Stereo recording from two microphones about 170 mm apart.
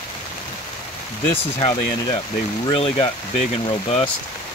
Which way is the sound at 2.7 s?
35° left (ahead or behind).